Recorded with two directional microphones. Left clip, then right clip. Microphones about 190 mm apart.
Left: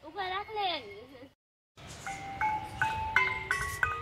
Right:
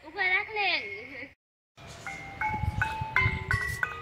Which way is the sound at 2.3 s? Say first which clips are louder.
Right 1 dB; centre (ahead or behind).